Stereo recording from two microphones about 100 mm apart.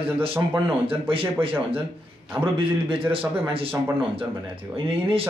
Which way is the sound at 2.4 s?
60° right (ahead or behind).